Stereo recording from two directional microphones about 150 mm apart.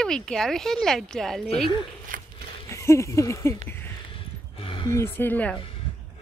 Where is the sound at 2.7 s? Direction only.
20° left (ahead or behind).